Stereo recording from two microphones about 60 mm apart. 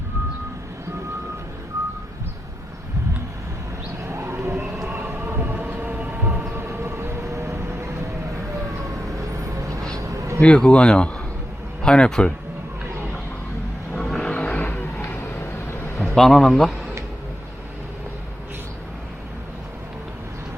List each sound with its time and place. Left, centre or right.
4.1 s a sound: right
4.9 s train: right
6.6 s vehicle: right
9.0 s vehicle: right
10.0 s a sound: right
10.4 s a man's voice: centre
13.9 s vehicle: centre
14.3 s vehicle: centre
14.6 s vehicle: left
16.1 s a man's voice: centre